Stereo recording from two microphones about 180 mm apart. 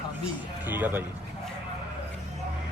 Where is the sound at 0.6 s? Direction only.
10° right (ahead or behind).